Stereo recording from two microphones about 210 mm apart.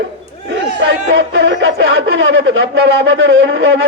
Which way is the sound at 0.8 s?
60° right (ahead or behind).